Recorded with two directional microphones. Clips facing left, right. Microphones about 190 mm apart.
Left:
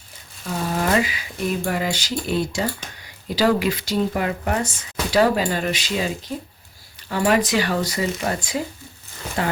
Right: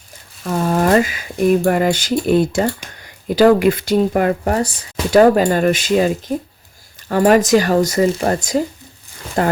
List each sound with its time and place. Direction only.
0.4 s speech: 50° right (ahead or behind); by 4.9 s 35° right (ahead or behind)
5.1 s speech: 50° right (ahead or behind)